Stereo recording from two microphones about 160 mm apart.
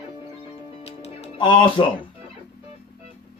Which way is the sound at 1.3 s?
30° left (ahead or behind).